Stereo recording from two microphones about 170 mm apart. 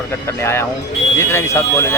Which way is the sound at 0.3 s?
15° left (ahead or behind).